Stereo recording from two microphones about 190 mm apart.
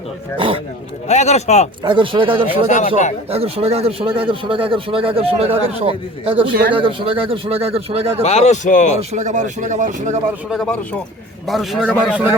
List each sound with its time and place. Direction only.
0.3 s a man's voice: 25° right (ahead or behind)
1.0 s speech: 35° left (ahead or behind)
1.8 s a man's voice: 25° right (ahead or behind)
2.6 s speech: 40° left (ahead or behind)
3.2 s a man's voice: 30° right (ahead or behind)
8.2 s speech: 35° left (ahead or behind)
9.0 s speech: 40° right (ahead or behind)
10.5 s a man's voice: centre (ahead or behind)